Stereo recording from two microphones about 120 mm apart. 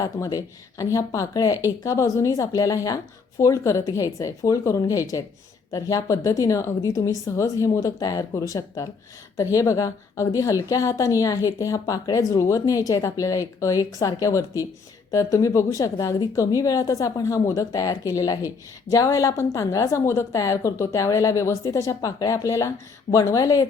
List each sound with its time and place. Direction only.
0.0 s a woman's voice: 30° left (ahead or behind)